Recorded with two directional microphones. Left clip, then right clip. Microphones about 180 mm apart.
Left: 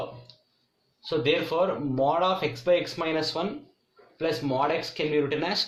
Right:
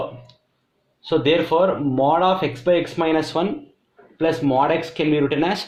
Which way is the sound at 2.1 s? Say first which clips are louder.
Right 7 dB; 35° right (ahead or behind).